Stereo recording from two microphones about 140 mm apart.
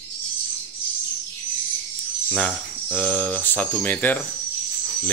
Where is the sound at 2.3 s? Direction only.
5° left (ahead or behind).